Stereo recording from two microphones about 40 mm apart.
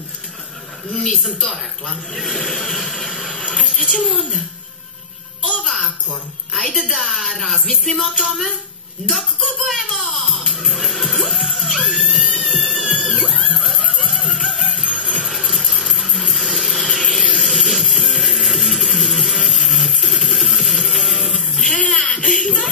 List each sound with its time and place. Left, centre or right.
0.9 s a woman's voice: centre
5.7 s babbling: centre
6.5 s a woman's voice: centre
8.1 s a sound: centre
9.0 s speech: right
9.6 s a sound: centre
10.4 s music: centre
13.1 s music: centre
21.8 s giggle: centre
22.2 s belly laugh: centre